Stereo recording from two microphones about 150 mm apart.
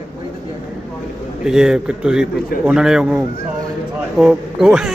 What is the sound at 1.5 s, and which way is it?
A man's voice, 5° right (ahead or behind).